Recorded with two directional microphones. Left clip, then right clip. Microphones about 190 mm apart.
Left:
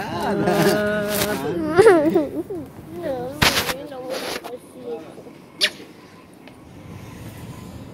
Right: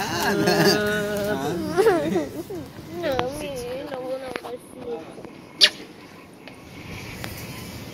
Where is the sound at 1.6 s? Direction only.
40° left (ahead or behind).